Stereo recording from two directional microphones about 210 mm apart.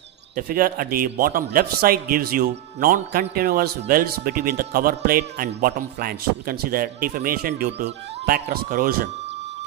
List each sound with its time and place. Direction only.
0.4 s a man's voice: 45° right (ahead or behind)